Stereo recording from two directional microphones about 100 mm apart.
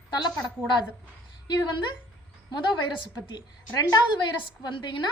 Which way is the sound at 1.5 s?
45° left (ahead or behind).